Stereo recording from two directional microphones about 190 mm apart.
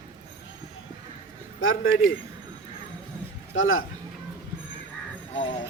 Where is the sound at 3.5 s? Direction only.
90° left.